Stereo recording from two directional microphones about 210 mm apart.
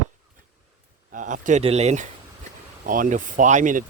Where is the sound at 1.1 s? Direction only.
40° right (ahead or behind).